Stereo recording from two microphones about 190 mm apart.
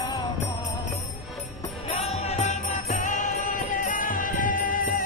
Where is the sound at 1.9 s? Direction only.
35° left (ahead or behind).